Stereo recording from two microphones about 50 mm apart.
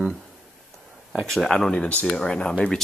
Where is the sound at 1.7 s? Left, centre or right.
Left.